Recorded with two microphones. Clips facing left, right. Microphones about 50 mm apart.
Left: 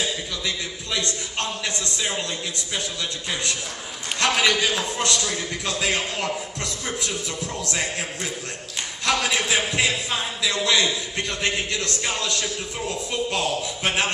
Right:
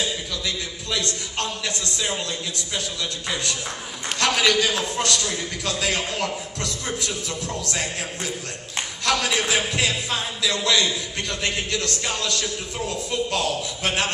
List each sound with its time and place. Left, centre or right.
1.6 s a man's voice: centre
4.2 s a man's voice: centre